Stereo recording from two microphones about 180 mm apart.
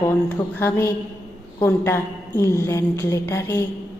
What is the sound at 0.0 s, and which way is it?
A woman's voice, 15° left (ahead or behind).